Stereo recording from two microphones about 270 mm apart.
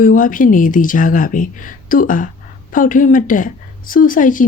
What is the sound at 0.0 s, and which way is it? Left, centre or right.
A woman's voice, left.